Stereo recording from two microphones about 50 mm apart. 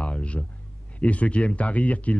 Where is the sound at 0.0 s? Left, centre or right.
Left.